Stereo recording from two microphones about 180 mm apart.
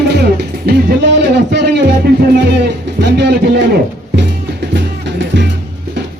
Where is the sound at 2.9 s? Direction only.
70° right (ahead or behind).